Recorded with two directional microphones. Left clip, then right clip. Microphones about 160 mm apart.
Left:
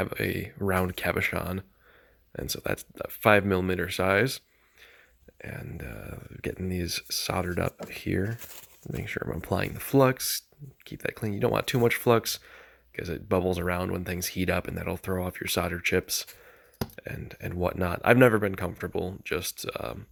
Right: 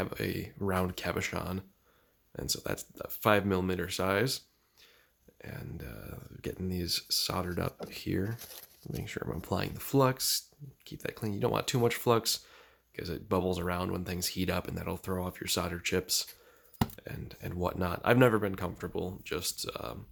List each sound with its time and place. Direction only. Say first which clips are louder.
0.0 s speech: left 5 dB; 30° left (ahead or behind)